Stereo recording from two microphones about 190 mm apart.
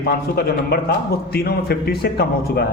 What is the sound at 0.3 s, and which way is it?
A man's voice, 55° left (ahead or behind).